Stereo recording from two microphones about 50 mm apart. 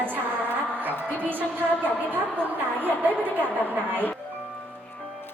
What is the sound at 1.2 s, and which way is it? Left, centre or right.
Speech, right.